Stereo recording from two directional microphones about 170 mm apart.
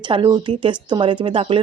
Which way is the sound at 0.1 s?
25° right (ahead or behind).